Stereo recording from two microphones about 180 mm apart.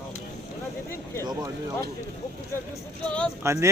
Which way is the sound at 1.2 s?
20° right (ahead or behind).